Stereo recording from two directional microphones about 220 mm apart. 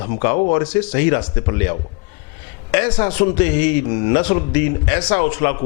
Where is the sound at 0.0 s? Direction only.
15° left (ahead or behind).